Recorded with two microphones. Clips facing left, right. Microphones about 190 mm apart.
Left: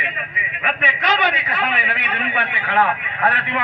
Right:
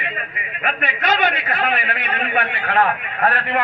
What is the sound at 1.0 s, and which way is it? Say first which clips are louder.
A man's voice: right 2 dB; 50° right (ahead or behind).